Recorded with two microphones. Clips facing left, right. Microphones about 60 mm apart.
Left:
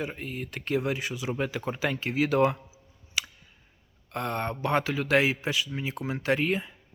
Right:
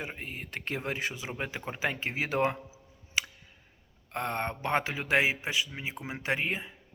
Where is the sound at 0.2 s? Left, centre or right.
Right.